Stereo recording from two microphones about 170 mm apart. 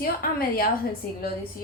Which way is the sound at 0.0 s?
60° left (ahead or behind).